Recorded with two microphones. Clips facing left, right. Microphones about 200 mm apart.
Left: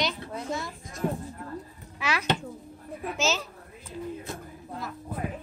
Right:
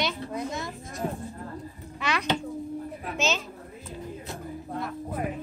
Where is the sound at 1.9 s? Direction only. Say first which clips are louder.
Right 1 dB; 5° left (ahead or behind).